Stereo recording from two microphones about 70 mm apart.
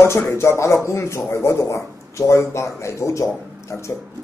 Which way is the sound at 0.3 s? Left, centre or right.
Left.